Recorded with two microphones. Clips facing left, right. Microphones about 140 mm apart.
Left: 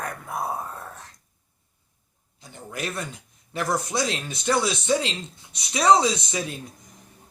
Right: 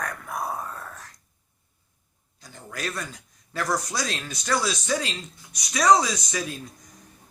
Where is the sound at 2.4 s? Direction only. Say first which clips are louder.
Left 1 dB; 20° left (ahead or behind).